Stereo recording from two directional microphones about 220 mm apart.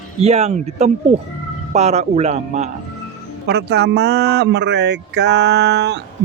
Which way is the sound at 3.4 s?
50° right (ahead or behind).